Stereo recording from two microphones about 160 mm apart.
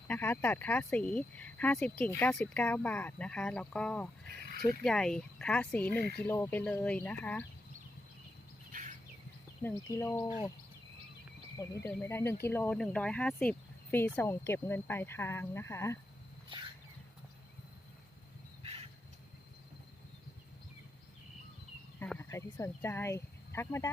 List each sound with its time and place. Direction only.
0.1 s speech: 10° left (ahead or behind)
9.6 s speech: 15° left (ahead or behind)
11.5 s speech: 20° left (ahead or behind)
21.9 s speech: 10° left (ahead or behind)